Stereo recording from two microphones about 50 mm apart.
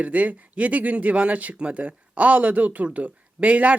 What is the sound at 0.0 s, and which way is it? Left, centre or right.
Speech, right.